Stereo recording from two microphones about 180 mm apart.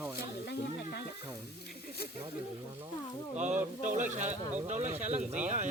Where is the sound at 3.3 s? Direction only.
40° right (ahead or behind).